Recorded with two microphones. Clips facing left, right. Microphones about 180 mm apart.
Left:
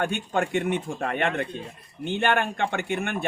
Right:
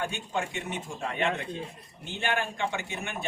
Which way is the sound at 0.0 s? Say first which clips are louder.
Left 6 dB; 60° left (ahead or behind).